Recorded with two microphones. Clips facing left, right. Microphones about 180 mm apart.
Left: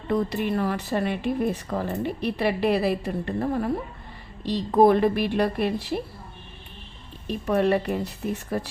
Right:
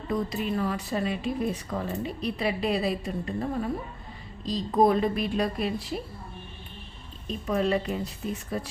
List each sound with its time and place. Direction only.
0.1 s speech: 65° left (ahead or behind)
7.3 s speech: 65° left (ahead or behind)